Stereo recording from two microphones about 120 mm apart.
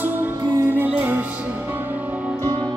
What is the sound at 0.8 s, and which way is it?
Music, 15° right (ahead or behind).